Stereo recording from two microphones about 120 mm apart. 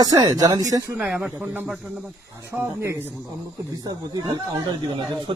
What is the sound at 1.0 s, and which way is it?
Speech, 10° right (ahead or behind).